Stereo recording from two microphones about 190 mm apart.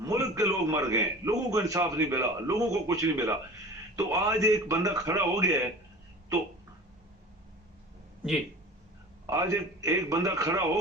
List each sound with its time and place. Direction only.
0.0 s a man's voice: 15° right (ahead or behind)
9.2 s a man's voice: 15° right (ahead or behind)